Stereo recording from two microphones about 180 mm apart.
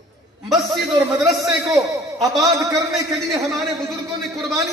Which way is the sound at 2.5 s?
15° right (ahead or behind).